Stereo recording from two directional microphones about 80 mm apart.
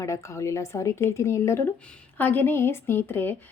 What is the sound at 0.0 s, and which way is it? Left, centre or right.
A woman's voice, left.